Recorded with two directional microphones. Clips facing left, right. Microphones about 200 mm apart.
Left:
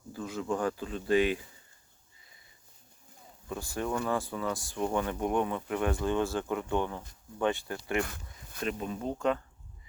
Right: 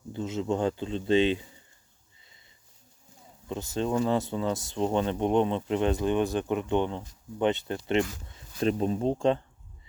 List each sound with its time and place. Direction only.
0.1 s speech: 25° right (ahead or behind)
3.5 s speech: 20° right (ahead or behind)